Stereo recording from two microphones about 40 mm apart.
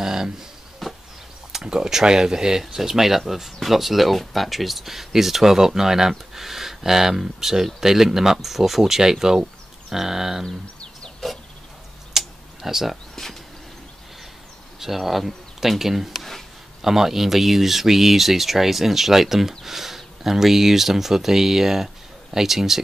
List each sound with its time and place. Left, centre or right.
0.0 s speech: centre
0.8 s chop: centre
1.5 s speech: centre
10.4 s a sound: left
12.1 s tick-tock: centre
12.9 s a sound: centre
14.8 s speech: centre
16.8 s speech: centre